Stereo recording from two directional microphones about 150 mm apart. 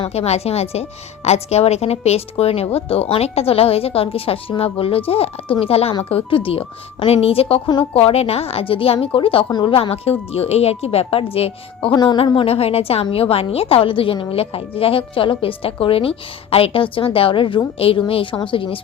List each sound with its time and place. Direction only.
0.0 s speech: 45° left (ahead or behind)